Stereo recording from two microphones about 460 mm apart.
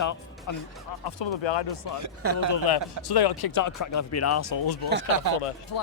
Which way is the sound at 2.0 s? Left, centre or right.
Right.